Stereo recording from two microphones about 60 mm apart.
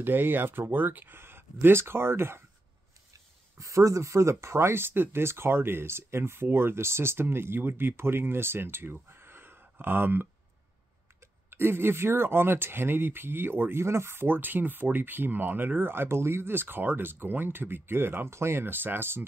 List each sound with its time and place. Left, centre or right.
0.0 s speech: right
3.1 s speech: right
11.5 s speech: right